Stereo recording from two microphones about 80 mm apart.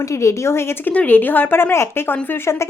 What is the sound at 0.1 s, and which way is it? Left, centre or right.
A woman's voice, left.